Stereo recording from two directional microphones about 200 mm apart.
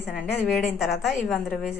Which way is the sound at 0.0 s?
5° right (ahead or behind).